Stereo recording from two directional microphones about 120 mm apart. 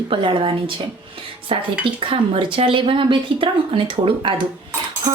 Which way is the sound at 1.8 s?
45° right (ahead or behind).